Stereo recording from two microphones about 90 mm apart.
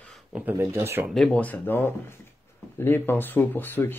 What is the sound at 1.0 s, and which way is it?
Speech, centre (ahead or behind).